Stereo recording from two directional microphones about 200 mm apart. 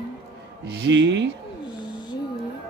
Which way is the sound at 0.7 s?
60° right (ahead or behind).